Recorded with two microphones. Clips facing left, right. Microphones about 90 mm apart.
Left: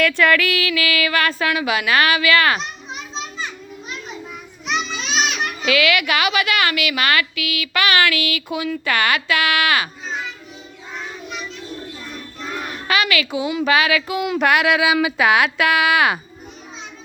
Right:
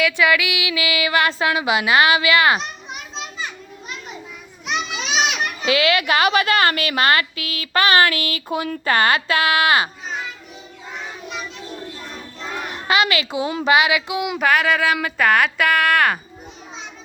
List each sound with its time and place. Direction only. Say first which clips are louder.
0.0 s female singing: left 1 dB; 10° right (ahead or behind)
4.6 s children playing: left 1 dB; 5° right (ahead or behind)
5.6 s a woman's voice: even; 30° right (ahead or behind)
12.7 s a sound: right 1 dB; 30° right (ahead or behind)
13.7 s female singing: right 2 dB; 20° right (ahead or behind)
14.3 s a woman's voice: left 1 dB; 5° left (ahead or behind)